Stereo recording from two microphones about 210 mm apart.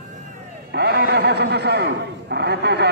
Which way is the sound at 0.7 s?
50° right (ahead or behind).